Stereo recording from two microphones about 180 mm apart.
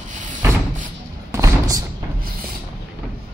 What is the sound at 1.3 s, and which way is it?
Thump, 20° right (ahead or behind).